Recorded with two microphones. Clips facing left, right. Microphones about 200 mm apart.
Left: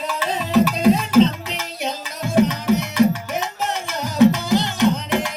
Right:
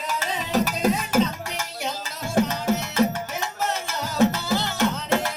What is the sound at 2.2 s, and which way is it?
Music, 15° left (ahead or behind).